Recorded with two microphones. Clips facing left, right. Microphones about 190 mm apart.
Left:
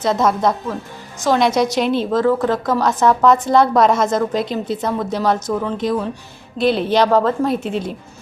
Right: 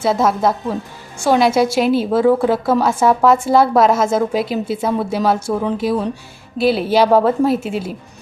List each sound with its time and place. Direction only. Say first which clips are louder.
0.0 s a woman's voice: right 1 dB; 5° right (ahead or behind)